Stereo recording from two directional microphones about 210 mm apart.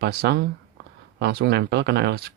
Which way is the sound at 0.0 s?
50° right (ahead or behind).